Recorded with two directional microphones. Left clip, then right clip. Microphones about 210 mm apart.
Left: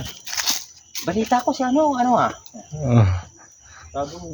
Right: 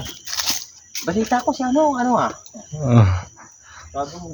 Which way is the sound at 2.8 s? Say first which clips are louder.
Right 2 dB; 10° right (ahead or behind).